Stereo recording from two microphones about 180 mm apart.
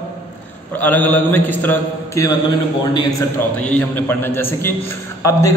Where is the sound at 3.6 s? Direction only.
10° left (ahead or behind).